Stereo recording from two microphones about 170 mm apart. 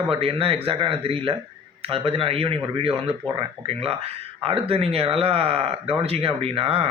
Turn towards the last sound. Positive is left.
turn(degrees=-35)  # may be behind; listen again after turning